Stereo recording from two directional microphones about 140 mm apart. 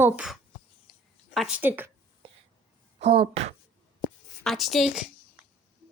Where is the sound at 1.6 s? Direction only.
15° right (ahead or behind).